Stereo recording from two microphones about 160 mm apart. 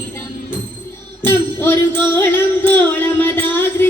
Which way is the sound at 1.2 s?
15° left (ahead or behind).